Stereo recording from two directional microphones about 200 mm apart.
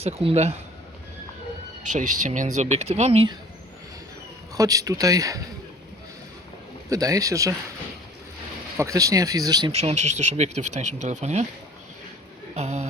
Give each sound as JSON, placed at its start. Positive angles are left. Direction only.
{"t": 0.0, "sound": "speech", "side_deg": -30}
{"t": 2.2, "sound": "speech", "side_deg": -40}
{"t": 4.5, "sound": "speech", "side_deg": -15}
{"t": 6.9, "sound": "speech", "side_deg": -15}
{"t": 8.8, "sound": "speech", "side_deg": -15}
{"t": 9.7, "sound": "speech", "side_deg": -35}
{"t": 12.5, "sound": "speech", "side_deg": -35}